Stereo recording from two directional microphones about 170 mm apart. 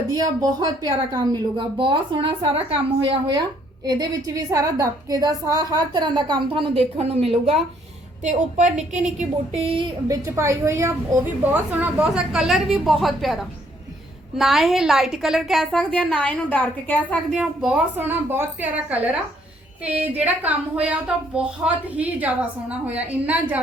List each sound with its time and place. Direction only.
0.1 s a woman's voice: 25° right (ahead or behind)